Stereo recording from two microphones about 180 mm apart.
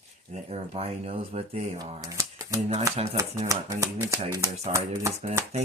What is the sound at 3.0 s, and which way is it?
Speech, 35° right (ahead or behind).